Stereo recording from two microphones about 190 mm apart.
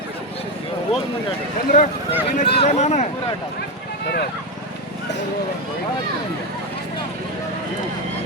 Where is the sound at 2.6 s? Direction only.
35° left (ahead or behind).